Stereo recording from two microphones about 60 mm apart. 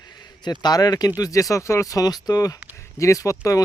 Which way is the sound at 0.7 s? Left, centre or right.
Left.